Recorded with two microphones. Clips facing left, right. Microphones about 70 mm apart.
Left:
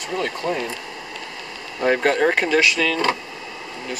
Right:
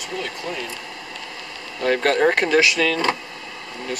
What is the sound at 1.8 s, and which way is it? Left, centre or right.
Speech, centre.